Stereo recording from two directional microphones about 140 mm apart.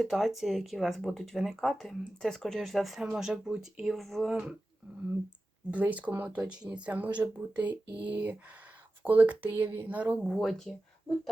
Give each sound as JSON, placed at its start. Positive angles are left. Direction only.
{"t": 0.0, "sound": "speech", "side_deg": 0}
{"t": 5.7, "sound": "speech", "side_deg": -10}